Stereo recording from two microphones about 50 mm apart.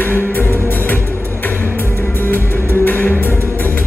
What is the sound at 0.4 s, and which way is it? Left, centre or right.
Music, left.